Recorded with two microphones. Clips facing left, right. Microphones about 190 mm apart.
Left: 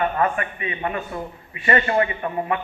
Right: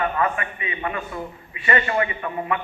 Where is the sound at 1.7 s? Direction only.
40° left (ahead or behind).